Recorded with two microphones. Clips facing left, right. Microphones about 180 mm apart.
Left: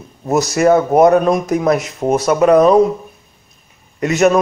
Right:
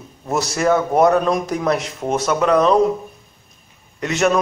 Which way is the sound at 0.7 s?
25° left (ahead or behind).